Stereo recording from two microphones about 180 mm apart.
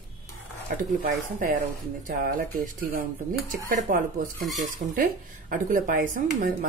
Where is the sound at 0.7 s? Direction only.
50° right (ahead or behind).